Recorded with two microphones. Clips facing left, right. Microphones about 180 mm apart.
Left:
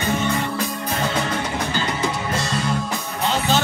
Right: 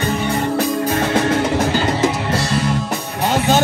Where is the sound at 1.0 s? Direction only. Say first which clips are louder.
Right 5 dB; 70° right (ahead or behind).